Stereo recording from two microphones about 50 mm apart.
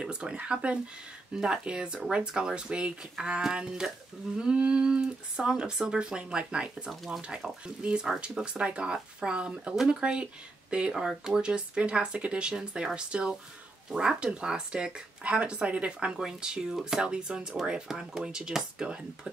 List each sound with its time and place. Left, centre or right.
0.0 s speech: centre
4.4 s speech: right
16.2 s speech: centre